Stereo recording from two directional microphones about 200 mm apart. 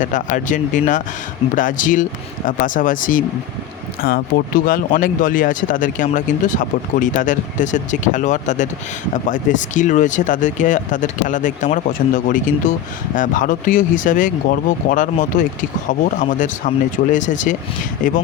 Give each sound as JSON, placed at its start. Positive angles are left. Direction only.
{"t": 0.0, "sound": "speech", "side_deg": 40}